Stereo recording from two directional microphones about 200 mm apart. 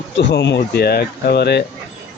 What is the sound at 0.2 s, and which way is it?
Speech, 60° left (ahead or behind).